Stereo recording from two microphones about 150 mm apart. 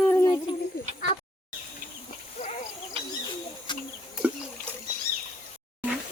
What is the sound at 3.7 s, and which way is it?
Bird, 30° left (ahead or behind).